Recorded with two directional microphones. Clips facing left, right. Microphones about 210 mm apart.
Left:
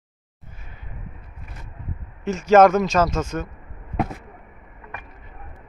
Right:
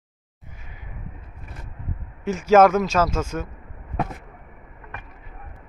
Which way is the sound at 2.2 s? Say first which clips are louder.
Left 1 dB; 10° right (ahead or behind).